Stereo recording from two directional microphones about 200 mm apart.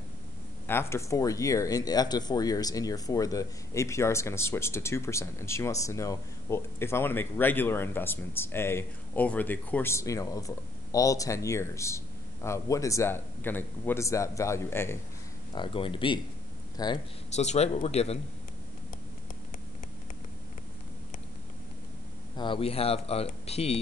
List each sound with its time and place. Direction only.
0.7 s speech: 10° left (ahead or behind)
15.5 s speech: 25° left (ahead or behind)
17.4 s speech: 35° left (ahead or behind)
22.4 s speech: 25° left (ahead or behind)